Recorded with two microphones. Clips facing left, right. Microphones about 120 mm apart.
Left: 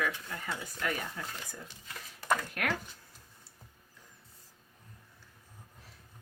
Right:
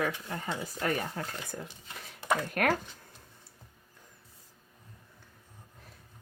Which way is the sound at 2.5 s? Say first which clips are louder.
Right 7 dB; 50° right (ahead or behind).